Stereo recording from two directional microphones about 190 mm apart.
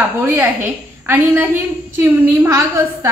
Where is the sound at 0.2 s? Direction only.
15° right (ahead or behind).